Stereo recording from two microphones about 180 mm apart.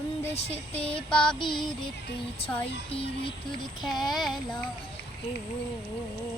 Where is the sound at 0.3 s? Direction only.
35° left (ahead or behind).